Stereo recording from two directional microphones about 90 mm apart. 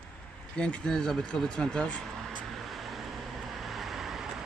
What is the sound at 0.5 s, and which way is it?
Speech, 10° left (ahead or behind).